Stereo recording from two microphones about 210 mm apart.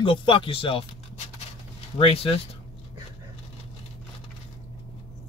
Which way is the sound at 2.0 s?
25° left (ahead or behind).